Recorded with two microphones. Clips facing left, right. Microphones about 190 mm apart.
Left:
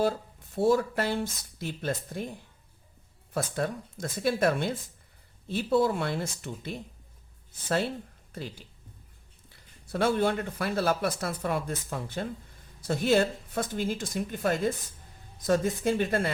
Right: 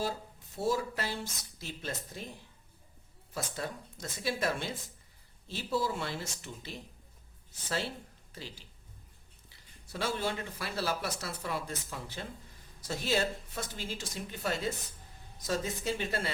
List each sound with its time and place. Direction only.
0.5 s speech: 55° left (ahead or behind)
3.3 s speech: 55° left (ahead or behind)
8.3 s speech: 55° left (ahead or behind)